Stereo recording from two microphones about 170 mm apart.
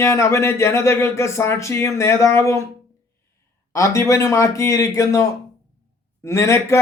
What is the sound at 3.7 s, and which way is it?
A man's voice, 20° left (ahead or behind).